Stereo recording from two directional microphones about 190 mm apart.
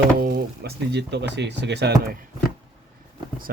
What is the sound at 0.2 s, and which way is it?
Speech, 55° right (ahead or behind).